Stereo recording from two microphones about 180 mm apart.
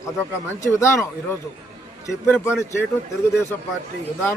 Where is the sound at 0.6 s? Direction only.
15° left (ahead or behind).